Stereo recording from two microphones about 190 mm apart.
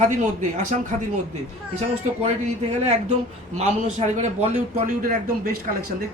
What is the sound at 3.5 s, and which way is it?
A man's voice, 35° right (ahead or behind).